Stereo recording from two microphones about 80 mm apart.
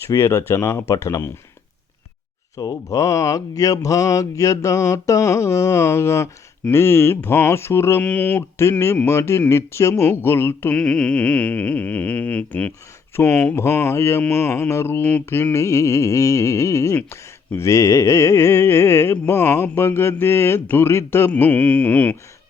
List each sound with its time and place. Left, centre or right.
0.1 s speech: left
2.6 s speech: left
8.0 s speech: left
10.8 s speech: centre
13.6 s speech: left